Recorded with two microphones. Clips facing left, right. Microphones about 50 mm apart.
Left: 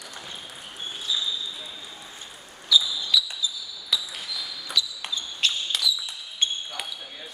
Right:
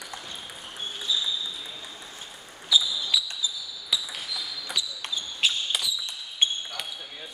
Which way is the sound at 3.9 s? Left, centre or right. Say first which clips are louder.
Left 1 dB; centre.